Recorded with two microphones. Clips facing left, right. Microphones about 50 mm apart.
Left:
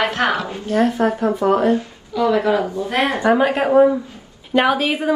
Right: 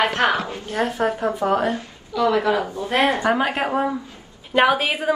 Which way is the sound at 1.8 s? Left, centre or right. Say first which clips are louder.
Left 2 dB; left.